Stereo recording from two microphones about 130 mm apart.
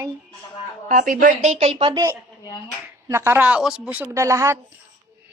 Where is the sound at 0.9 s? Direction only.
80° right; by 2.0 s 45° right (ahead or behind).